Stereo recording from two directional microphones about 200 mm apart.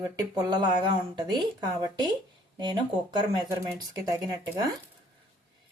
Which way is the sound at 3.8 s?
20° right (ahead or behind).